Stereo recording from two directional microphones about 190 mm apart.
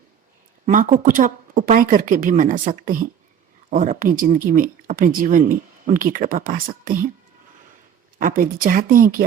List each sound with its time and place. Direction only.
0.6 s speech: 40° right (ahead or behind)
8.2 s speech: 45° right (ahead or behind)